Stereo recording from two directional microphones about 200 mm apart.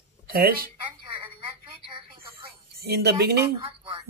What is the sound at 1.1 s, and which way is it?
Telephone, 25° right (ahead or behind).